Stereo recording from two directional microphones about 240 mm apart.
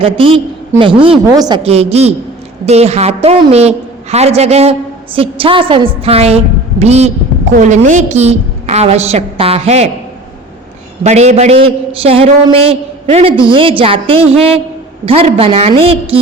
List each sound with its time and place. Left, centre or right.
0.0 s a man's voice: right
11.0 s a man's voice: right